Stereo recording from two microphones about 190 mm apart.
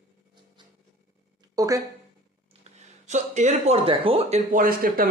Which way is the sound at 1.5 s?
15° right (ahead or behind).